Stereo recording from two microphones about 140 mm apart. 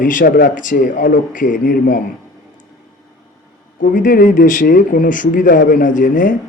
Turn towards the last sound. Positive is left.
turn(degrees=70)  # may be behind; listen again after turning